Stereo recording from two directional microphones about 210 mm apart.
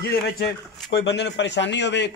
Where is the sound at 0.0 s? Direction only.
50° left (ahead or behind).